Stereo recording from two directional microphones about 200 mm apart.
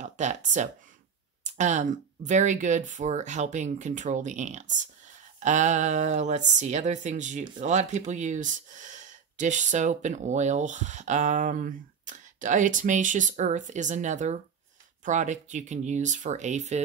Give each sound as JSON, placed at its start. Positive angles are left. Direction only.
{"t": 0.0, "sound": "speech", "side_deg": -35}